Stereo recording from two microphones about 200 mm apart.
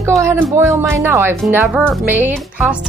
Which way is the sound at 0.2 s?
10° right (ahead or behind).